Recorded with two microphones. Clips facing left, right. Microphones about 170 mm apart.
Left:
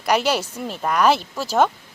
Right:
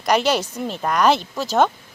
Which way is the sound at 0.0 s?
10° left (ahead or behind).